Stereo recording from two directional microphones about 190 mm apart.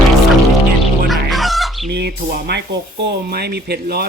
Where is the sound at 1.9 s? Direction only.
60° right (ahead or behind).